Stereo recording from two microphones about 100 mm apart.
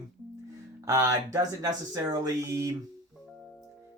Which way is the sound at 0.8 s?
30° right (ahead or behind).